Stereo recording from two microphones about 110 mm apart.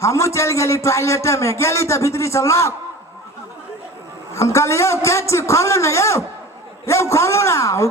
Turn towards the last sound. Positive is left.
turn(degrees=25)  # may be behind; listen again after turning